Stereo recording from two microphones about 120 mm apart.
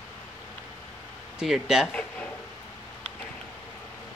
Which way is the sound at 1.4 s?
5° right (ahead or behind).